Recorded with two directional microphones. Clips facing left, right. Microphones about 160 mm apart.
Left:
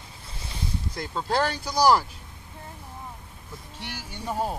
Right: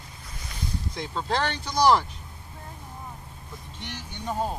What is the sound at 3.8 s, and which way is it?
Speech, 10° left (ahead or behind).